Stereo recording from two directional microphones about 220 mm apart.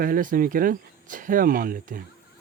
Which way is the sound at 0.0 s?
40° right (ahead or behind).